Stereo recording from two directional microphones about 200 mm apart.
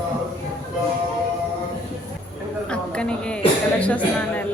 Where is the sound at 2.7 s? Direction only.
5° left (ahead or behind).